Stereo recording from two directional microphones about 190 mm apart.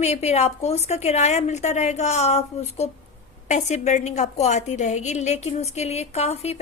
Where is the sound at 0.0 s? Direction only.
35° left (ahead or behind).